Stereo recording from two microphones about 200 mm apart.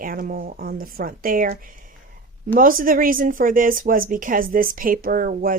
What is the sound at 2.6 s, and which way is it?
Speech, 45° right (ahead or behind).